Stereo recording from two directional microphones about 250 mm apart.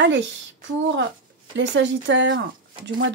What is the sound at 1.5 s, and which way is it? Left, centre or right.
Speech, right.